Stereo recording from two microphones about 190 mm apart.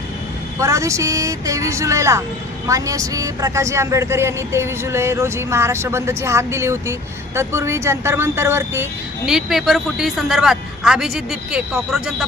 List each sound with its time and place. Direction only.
0.6 s a woman's voice: 15° right (ahead or behind)